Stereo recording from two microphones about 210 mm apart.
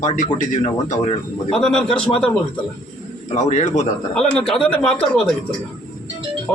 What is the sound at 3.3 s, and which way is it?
Speech, 35° left (ahead or behind).